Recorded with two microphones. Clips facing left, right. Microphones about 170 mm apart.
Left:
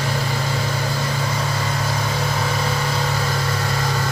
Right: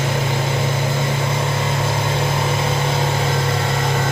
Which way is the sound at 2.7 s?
25° right (ahead or behind).